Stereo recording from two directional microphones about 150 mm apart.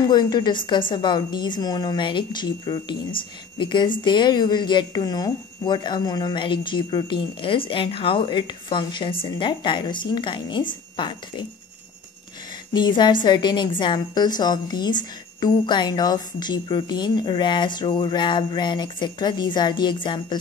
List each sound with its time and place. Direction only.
0.0 s a woman's voice: 25° left (ahead or behind)
12.7 s a woman's voice: 30° left (ahead or behind)